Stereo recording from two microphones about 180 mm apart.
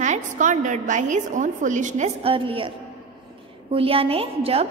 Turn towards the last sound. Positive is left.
turn(degrees=-35)  # may be behind; listen again after turning